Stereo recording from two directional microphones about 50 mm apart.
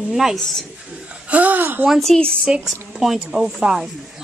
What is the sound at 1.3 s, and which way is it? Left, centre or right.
Whimper, right.